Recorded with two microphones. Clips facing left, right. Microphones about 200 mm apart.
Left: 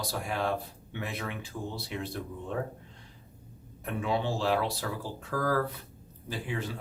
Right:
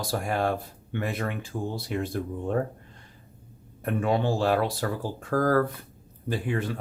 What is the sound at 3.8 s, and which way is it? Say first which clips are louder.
Speech: right 5 dB; 50° right (ahead or behind).